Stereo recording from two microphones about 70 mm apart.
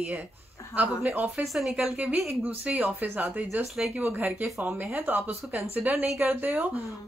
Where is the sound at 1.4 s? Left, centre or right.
Centre.